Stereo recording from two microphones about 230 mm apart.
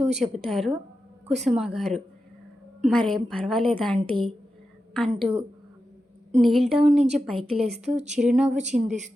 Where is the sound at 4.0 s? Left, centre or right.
Right.